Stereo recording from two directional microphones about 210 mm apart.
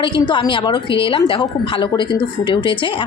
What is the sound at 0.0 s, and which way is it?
A woman's voice, 25° left (ahead or behind).